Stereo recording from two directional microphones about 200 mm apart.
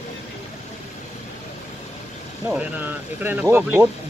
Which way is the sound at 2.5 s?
5° right (ahead or behind).